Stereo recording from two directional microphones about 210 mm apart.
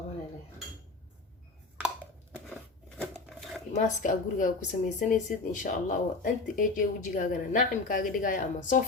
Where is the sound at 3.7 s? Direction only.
35° left (ahead or behind).